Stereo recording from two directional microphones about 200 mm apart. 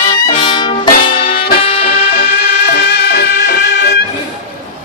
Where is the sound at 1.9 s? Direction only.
50° left (ahead or behind).